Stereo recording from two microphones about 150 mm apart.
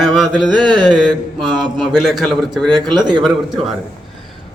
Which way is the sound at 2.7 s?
30° right (ahead or behind).